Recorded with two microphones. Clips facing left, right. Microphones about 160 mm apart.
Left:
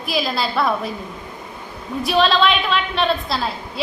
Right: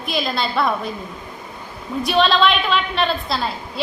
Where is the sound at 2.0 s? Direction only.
Centre (ahead or behind).